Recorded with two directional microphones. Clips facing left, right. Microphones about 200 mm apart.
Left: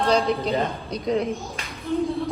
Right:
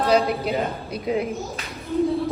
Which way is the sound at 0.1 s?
5° right (ahead or behind).